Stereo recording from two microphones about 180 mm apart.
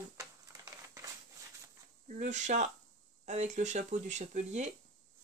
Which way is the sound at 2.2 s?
40° right (ahead or behind).